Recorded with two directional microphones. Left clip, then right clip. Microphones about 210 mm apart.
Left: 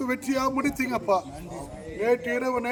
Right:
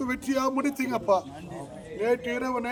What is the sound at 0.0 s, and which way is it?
A man's voice, 15° right (ahead or behind).